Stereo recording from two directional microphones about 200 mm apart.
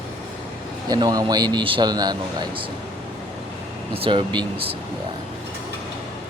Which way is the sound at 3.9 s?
25° right (ahead or behind).